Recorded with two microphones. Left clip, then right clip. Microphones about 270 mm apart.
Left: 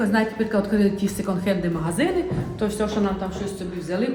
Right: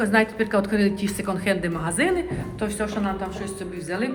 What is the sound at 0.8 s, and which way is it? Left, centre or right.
A woman's voice, centre.